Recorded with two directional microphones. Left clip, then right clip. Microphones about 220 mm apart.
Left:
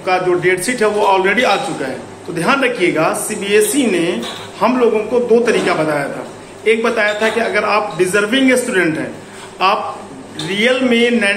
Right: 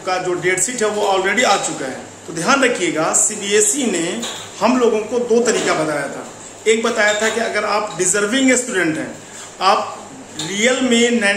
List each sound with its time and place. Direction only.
0.0 s speech: 10° right (ahead or behind)